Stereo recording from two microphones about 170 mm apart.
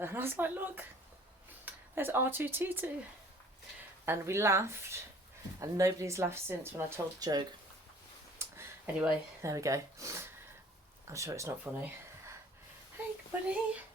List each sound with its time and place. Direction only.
0.0 s speech: 15° right (ahead or behind)
4.0 s speech: 15° right (ahead or behind)
8.4 s speech: 10° right (ahead or behind)